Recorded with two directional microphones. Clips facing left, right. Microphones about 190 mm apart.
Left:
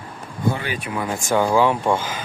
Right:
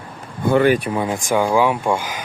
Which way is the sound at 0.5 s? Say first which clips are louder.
Right 13 dB; 50° right (ahead or behind).